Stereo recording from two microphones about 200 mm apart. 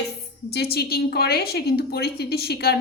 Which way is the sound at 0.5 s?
55° left (ahead or behind).